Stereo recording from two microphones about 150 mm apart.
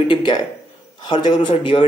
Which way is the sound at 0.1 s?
30° left (ahead or behind).